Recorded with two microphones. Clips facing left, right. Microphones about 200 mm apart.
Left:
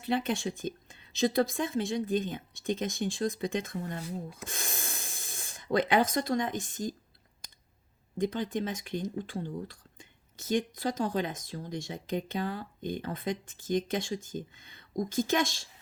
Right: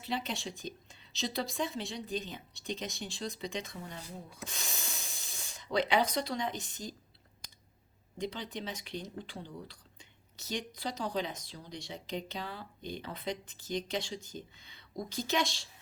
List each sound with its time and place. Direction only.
0.0 s speech: 50° left (ahead or behind)
8.2 s speech: 50° left (ahead or behind)